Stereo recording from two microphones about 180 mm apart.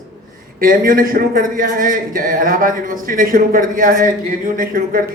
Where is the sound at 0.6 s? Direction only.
50° right (ahead or behind).